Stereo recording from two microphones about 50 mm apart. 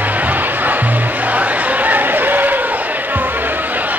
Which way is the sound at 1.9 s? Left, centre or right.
Right.